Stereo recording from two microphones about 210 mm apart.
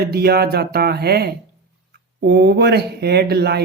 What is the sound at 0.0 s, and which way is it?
A man's voice, 50° right (ahead or behind).